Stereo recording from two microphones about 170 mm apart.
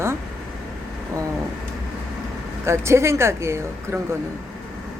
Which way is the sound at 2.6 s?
15° right (ahead or behind).